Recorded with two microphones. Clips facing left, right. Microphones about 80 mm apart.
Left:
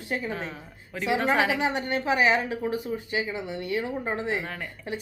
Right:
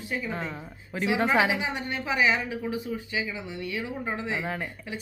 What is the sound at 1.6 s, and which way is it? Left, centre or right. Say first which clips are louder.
A woman's voice: left 5 dB; left.